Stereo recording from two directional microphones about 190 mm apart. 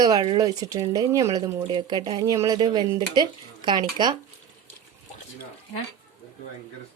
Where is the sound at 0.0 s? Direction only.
20° right (ahead or behind).